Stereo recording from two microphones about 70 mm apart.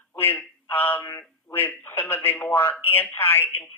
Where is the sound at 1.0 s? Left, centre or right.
Left.